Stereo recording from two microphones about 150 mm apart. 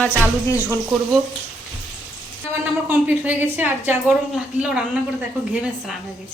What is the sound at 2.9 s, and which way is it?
A woman's voice, 10° right (ahead or behind).